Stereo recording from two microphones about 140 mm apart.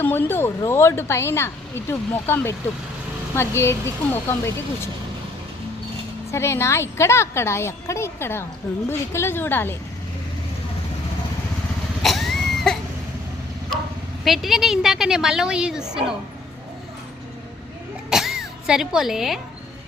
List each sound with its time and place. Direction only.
0.0 s speech: 15° left (ahead or behind)
6.3 s a woman's voice: 20° left (ahead or behind)
12.0 s a sound: centre (ahead or behind)
14.3 s a woman's voice: centre (ahead or behind)
18.1 s music: 5° right (ahead or behind)